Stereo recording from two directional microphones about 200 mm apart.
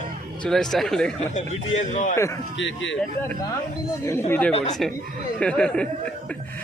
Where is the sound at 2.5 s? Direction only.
65° left (ahead or behind).